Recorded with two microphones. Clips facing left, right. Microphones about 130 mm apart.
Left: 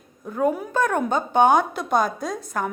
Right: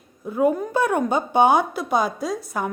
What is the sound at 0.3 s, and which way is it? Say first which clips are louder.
A woman's voice: right 3 dB; 5° right (ahead or behind).